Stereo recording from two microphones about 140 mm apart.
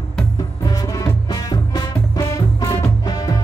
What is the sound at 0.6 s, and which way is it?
Music, 25° left (ahead or behind).